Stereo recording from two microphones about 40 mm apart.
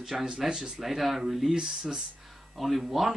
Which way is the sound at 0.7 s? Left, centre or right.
Centre.